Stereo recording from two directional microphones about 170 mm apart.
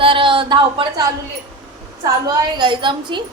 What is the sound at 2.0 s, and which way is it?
Speech, 20° right (ahead or behind).